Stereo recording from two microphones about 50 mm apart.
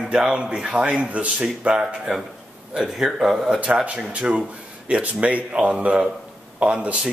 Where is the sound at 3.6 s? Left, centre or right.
Right.